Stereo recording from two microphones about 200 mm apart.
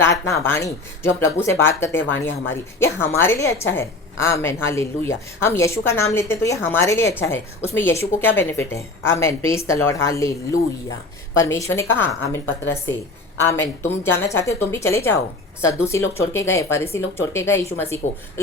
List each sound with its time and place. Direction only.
0.0 s a woman's voice: 15° left (ahead or behind)
2.2 s speech: 75° left (ahead or behind)
2.8 s a woman's voice: 10° left (ahead or behind)
11.4 s a woman's voice: 15° left (ahead or behind)
13.8 s a woman's voice: 10° left (ahead or behind)